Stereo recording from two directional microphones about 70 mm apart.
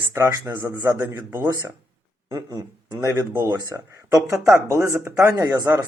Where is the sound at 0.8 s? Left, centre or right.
Right.